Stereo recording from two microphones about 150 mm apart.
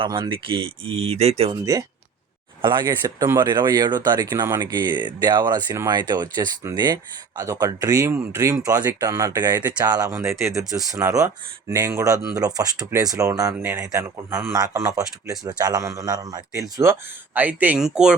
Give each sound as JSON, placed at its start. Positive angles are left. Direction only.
{"t": 0.0, "sound": "speech", "side_deg": -35}
{"t": 1.7, "sound": "speech", "side_deg": -20}